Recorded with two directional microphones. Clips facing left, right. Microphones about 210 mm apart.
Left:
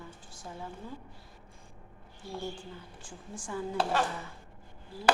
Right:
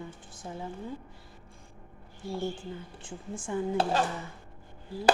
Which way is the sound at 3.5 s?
20° right (ahead or behind).